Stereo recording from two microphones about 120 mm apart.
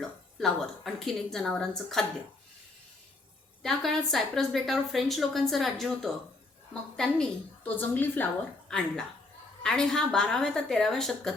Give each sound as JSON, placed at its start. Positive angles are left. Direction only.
{"t": 0.3, "sound": "a woman's voice", "side_deg": 5}
{"t": 3.6, "sound": "a woman's voice", "side_deg": 5}
{"t": 7.6, "sound": "a woman's voice", "side_deg": 15}
{"t": 8.7, "sound": "a woman's voice", "side_deg": 5}